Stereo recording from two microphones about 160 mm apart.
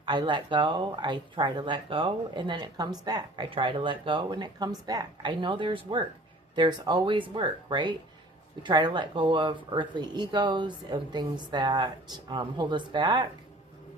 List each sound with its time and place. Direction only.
0.0 s speech: 30° right (ahead or behind)